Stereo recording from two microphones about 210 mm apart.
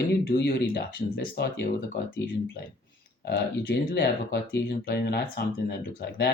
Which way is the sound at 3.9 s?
55° left (ahead or behind).